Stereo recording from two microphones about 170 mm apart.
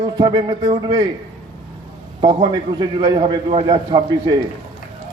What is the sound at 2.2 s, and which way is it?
A man's voice, 30° right (ahead or behind).